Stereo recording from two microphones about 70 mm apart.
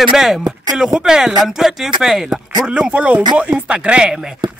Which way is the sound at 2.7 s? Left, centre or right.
Centre.